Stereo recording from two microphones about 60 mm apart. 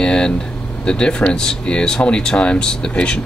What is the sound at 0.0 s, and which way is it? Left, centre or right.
Air conditioning, centre.